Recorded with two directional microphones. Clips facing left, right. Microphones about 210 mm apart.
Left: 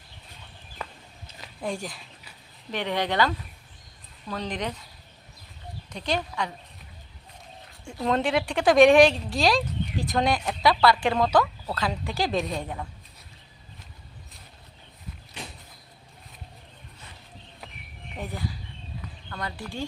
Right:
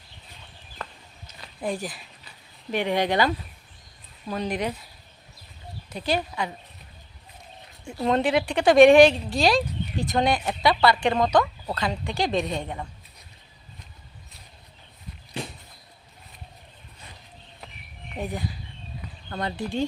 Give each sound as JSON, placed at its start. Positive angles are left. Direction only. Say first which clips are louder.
{"t": 0.8, "sound": "a sound", "louder": "even", "side_deg": 10}
{"t": 1.3, "sound": "a sound", "louder": "even", "side_deg": 30}
{"t": 1.6, "sound": "speech", "louder": "right 2 dB", "side_deg": -5}
{"t": 5.9, "sound": "speech", "louder": "right 2 dB", "side_deg": -5}
{"t": 7.9, "sound": "speech", "louder": "right 2 dB", "side_deg": 0}
{"t": 18.2, "sound": "speech", "louder": "right 3 dB", "side_deg": -15}